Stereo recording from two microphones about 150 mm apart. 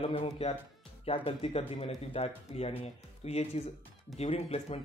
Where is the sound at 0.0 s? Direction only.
40° left (ahead or behind).